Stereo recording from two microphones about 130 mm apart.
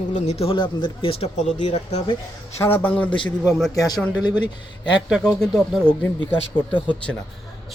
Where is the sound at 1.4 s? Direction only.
60° left (ahead or behind).